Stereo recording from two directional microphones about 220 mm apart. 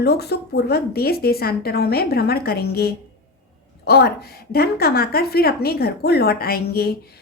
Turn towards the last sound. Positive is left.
turn(degrees=45)  # may be behind; listen again after turning